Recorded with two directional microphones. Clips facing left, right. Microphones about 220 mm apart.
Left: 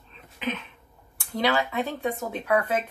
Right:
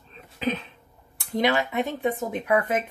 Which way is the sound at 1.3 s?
20° right (ahead or behind).